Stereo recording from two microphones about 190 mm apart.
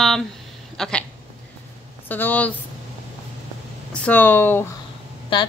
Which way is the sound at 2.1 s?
10° left (ahead or behind).